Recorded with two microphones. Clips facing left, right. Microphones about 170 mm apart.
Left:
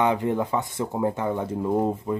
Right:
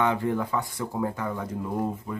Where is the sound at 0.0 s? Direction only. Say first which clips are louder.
Left 3 dB; 20° left (ahead or behind).